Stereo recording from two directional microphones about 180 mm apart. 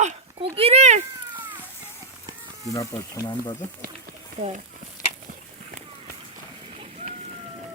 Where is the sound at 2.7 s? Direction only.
15° left (ahead or behind).